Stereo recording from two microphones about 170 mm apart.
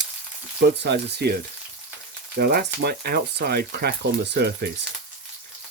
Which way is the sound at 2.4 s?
70° right (ahead or behind).